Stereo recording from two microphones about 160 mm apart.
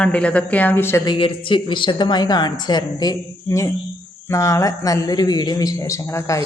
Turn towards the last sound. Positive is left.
turn(degrees=20)  # may be behind; listen again after turning